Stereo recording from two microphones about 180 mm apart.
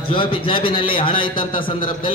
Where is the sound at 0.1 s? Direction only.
30° left (ahead or behind).